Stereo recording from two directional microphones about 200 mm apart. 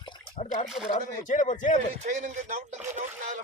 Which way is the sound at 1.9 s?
35° right (ahead or behind).